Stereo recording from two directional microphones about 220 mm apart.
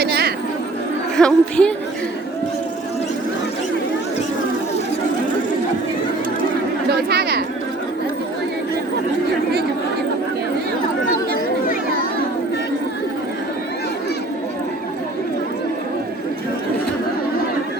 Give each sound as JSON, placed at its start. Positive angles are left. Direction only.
{"t": 0.0, "sound": "chatter", "side_deg": -45}
{"t": 1.1, "sound": "a woman's voice", "side_deg": 5}
{"t": 6.9, "sound": "chatter", "side_deg": -45}
{"t": 11.6, "sound": "children playing", "side_deg": 40}